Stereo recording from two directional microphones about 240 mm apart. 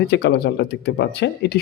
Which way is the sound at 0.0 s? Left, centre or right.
Left.